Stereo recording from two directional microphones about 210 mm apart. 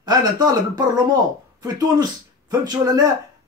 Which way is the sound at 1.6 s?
20° right (ahead or behind).